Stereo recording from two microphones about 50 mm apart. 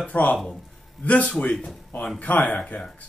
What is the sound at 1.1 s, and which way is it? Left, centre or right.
A man's voice, left.